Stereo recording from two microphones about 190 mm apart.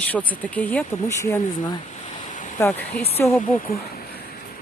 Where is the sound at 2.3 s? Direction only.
40° left (ahead or behind).